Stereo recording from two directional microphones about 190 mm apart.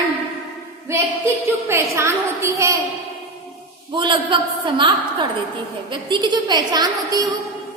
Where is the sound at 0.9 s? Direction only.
15° right (ahead or behind).